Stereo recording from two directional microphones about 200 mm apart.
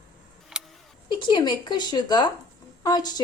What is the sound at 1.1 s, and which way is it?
A woman's voice, 25° left (ahead or behind).